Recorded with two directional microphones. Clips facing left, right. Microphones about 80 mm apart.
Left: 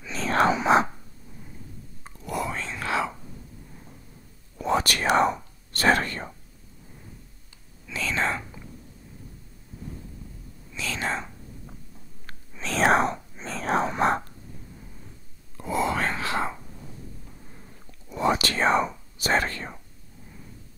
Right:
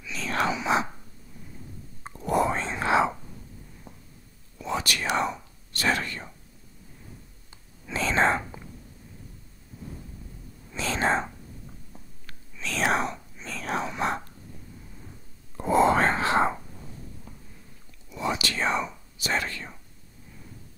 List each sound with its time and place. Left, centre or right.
0.0 s whispering: left
2.0 s whispering: right
4.6 s whispering: left
7.8 s whispering: right
10.7 s whispering: right
12.3 s whispering: left
15.5 s whispering: right
18.1 s whispering: left